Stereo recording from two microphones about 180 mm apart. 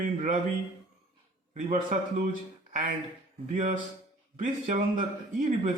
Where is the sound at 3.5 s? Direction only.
45° right (ahead or behind).